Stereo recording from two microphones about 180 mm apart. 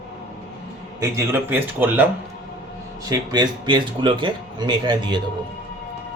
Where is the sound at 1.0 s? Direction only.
15° right (ahead or behind).